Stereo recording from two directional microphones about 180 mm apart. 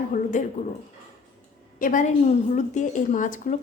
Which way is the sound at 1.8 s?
45° left (ahead or behind).